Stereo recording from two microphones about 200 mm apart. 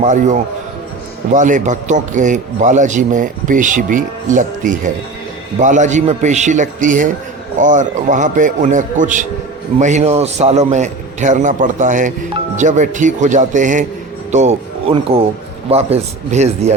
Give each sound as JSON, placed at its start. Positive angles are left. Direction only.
{"t": 0.0, "sound": "a man's voice", "side_deg": -35}